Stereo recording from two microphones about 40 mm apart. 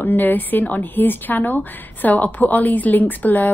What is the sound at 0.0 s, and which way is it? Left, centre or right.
Speech, left.